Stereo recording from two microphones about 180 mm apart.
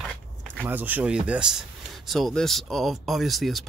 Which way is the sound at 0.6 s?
10° right (ahead or behind).